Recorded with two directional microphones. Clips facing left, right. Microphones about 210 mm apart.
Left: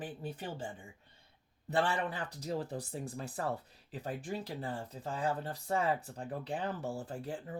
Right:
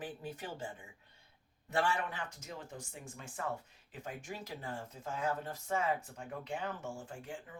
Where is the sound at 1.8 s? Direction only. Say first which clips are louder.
Left 2 dB; 35° left (ahead or behind).